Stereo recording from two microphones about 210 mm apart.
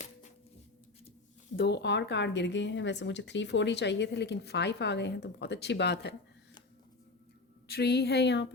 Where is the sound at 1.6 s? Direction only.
55° left (ahead or behind).